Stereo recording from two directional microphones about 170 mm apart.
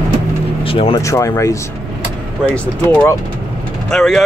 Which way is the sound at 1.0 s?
15° left (ahead or behind).